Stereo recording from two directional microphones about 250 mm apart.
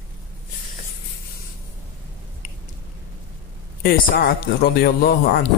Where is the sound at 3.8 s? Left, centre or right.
Left.